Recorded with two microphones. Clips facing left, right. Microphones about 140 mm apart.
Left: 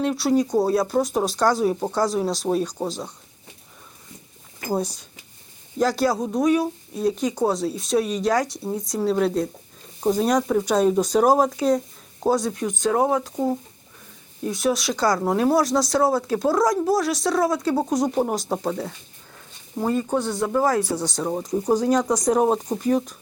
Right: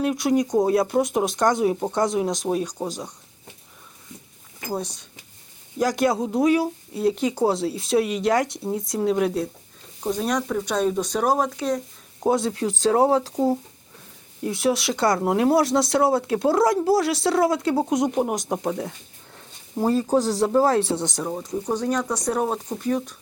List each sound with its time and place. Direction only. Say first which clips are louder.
0.0 s speech: left 1 dB; 10° right (ahead or behind)
4.7 s speech: left 4 dB; 10° left (ahead or behind)
5.8 s speech: even; 15° right (ahead or behind)
9.1 s speech: left 1 dB; 10° right (ahead or behind)
10.1 s speech: left 4 dB; 10° left (ahead or behind)
12.3 s speech: even; 25° right (ahead or behind)
13.3 s speech: right 2 dB; 10° right (ahead or behind)
14.5 s speech: even; 25° right (ahead or behind)
18.1 s speech: left 1 dB; 10° right (ahead or behind)
20.1 s speech: right 3 dB; 35° right (ahead or behind); by 21.2 s 20° right (ahead or behind)
21.2 s speech: left 8 dB; 10° left (ahead or behind)